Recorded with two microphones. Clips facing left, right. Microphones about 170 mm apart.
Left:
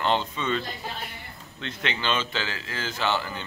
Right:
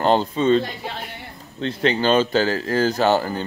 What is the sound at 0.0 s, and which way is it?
Speech, 40° right (ahead or behind).